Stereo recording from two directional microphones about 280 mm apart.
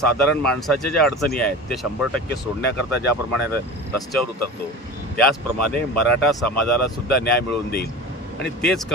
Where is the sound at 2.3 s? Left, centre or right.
Left.